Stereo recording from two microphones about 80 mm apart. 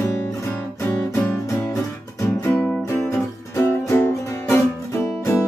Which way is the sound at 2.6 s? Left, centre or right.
Centre.